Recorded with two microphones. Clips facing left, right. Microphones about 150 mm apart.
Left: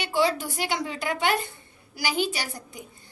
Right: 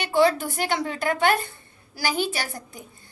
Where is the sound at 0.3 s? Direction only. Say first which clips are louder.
Right 3 dB; 50° right (ahead or behind).